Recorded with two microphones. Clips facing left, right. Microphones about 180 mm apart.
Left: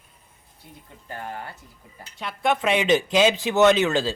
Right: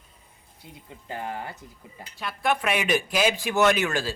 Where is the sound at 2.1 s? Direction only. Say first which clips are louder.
Left 2 dB; 20° left (ahead or behind).